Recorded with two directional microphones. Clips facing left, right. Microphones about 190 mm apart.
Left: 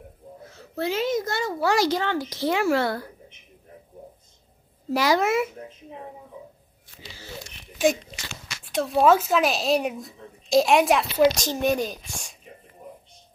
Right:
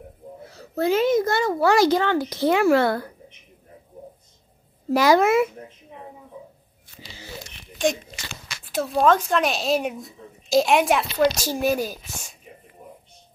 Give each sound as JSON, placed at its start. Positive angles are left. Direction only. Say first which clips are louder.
{"t": 0.5, "sound": "a child's voice", "louder": "right 6 dB", "side_deg": -40}
{"t": 4.9, "sound": "a child's voice", "louder": "right 4 dB", "side_deg": -50}
{"t": 7.8, "sound": "a child's voice", "louder": "left 1 dB", "side_deg": 5}